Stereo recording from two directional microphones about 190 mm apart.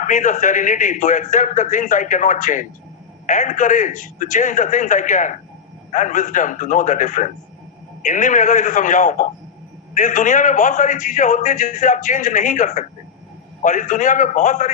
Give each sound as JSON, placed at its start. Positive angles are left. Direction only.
{"t": 0.0, "sound": "a man's voice", "side_deg": 40}